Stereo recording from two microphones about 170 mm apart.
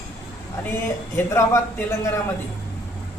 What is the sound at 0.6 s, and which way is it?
A man's voice, 15° left (ahead or behind).